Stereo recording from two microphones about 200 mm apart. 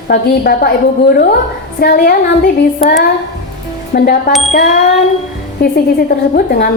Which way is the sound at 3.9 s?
50° left (ahead or behind).